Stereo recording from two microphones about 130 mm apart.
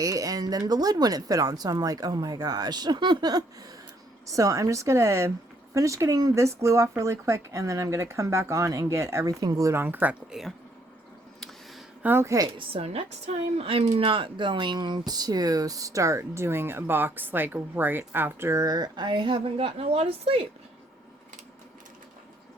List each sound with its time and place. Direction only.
0.0 s speech: 25° right (ahead or behind)
12.0 s speech: 20° right (ahead or behind)
12.5 s speech: 50° right (ahead or behind)
14.0 s speech: 40° right (ahead or behind)